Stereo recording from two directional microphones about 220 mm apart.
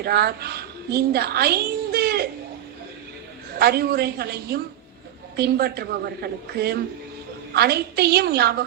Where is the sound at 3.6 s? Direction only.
45° right (ahead or behind).